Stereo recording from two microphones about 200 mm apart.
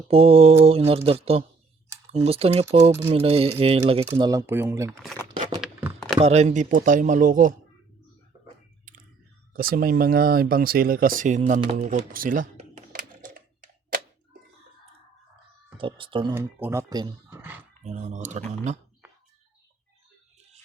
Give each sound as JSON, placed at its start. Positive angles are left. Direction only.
{"t": 0.1, "sound": "speech", "side_deg": -30}
{"t": 4.1, "sound": "speech", "side_deg": -15}
{"t": 4.9, "sound": "speech", "side_deg": 5}
{"t": 5.5, "sound": "a sound", "side_deg": 0}
{"t": 6.1, "sound": "speech", "side_deg": -35}
{"t": 8.9, "sound": "chewing", "side_deg": -40}
{"t": 9.5, "sound": "speech", "side_deg": -45}
{"t": 11.6, "sound": "typing", "side_deg": -30}
{"t": 15.8, "sound": "speech", "side_deg": -25}
{"t": 16.3, "sound": "speech", "side_deg": -10}
{"t": 17.8, "sound": "speech", "side_deg": -35}